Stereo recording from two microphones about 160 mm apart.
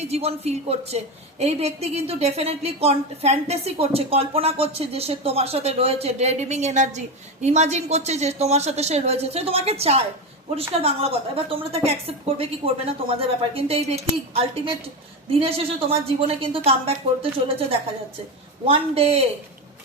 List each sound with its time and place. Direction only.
0.0 s a woman's voice: 40° right (ahead or behind)